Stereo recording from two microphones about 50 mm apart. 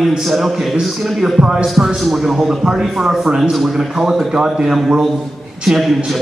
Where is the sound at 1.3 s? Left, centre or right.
Centre.